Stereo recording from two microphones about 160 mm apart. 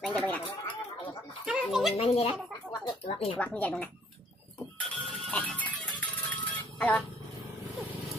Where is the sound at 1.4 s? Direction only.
5° right (ahead or behind).